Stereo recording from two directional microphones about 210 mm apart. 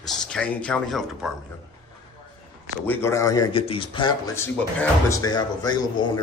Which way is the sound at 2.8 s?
10° left (ahead or behind).